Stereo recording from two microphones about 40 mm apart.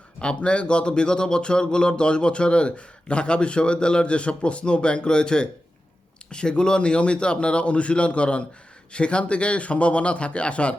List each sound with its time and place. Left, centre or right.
0.2 s speech: left